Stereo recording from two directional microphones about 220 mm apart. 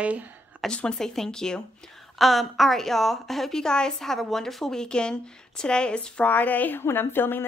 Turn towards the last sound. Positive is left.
turn(degrees=10)  # may be behind; listen again after turning